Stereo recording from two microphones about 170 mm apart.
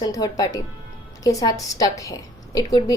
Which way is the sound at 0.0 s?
20° left (ahead or behind).